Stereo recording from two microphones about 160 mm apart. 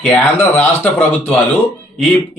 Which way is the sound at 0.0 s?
10° left (ahead or behind).